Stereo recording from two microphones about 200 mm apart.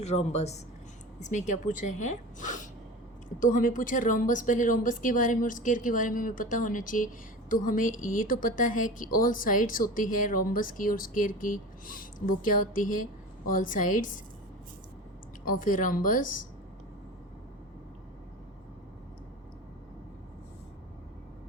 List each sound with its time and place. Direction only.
0.0 s a woman's voice: 35° left (ahead or behind)
15.4 s a woman's voice: 45° left (ahead or behind)